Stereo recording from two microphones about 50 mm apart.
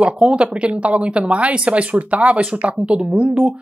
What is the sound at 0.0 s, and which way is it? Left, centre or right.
Speech, right.